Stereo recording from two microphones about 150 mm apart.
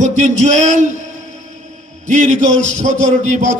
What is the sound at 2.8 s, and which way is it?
Speech, 55° right (ahead or behind).